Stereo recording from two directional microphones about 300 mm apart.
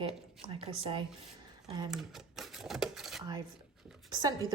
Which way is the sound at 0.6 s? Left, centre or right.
Centre.